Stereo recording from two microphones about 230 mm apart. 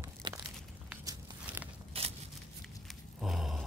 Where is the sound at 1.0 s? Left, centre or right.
Centre.